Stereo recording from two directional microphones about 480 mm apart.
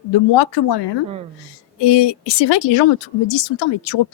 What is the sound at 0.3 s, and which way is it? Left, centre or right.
Speech, left.